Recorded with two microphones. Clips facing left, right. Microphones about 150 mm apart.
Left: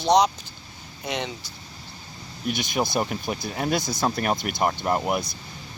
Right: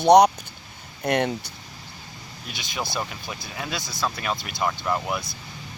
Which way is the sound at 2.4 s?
50° left (ahead or behind).